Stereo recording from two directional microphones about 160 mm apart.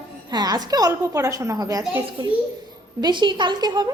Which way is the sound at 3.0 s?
30° right (ahead or behind).